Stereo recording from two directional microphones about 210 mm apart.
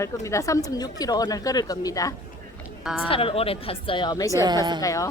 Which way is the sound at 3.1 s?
25° left (ahead or behind).